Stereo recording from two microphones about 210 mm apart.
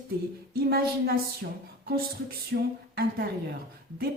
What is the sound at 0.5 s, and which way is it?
Speech, 45° right (ahead or behind).